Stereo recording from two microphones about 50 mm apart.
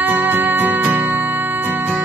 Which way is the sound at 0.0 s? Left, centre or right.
Right.